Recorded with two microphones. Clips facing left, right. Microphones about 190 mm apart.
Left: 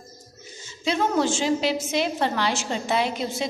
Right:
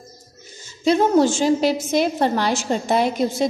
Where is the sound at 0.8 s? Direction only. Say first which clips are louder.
Right 7 dB; 40° right (ahead or behind).